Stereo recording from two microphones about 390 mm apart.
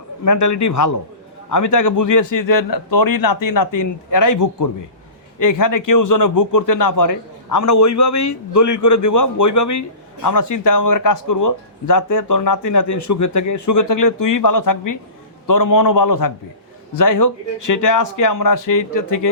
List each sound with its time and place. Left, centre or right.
0.3 s a man's voice: left